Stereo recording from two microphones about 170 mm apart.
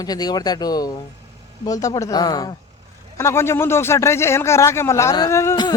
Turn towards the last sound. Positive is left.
turn(degrees=20)  # may be behind; listen again after turning